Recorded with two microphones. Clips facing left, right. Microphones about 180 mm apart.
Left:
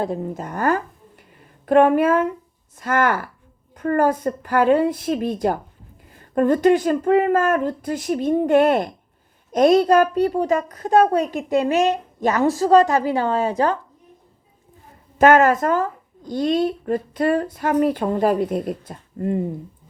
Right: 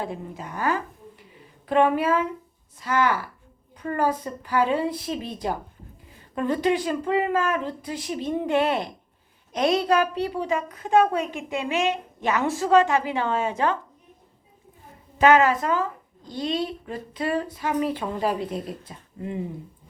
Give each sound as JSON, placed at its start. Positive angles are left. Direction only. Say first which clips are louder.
{"t": 0.0, "sound": "a woman's voice", "louder": "left 7 dB", "side_deg": 45}
{"t": 15.2, "sound": "speech", "louder": "left 4 dB", "side_deg": 50}